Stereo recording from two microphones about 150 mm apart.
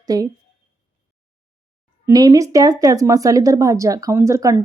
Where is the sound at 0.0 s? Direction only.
25° right (ahead or behind).